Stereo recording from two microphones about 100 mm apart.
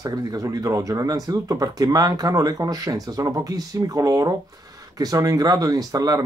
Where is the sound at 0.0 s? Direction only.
40° right (ahead or behind).